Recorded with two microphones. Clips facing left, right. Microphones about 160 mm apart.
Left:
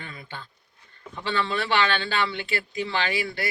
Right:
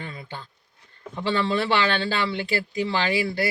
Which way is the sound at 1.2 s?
35° right (ahead or behind).